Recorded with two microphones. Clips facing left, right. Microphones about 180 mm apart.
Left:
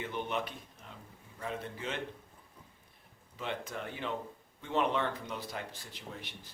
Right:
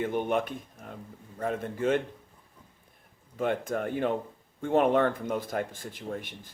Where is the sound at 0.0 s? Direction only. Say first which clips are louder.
Right 8 dB; 50° right (ahead or behind).